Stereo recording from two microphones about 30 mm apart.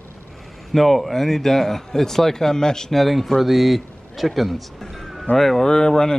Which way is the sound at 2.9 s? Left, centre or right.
Centre.